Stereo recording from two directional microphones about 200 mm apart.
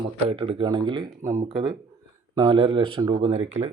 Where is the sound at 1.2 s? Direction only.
10° right (ahead or behind).